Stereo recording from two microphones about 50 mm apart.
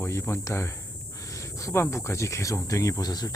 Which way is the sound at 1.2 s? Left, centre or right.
Left.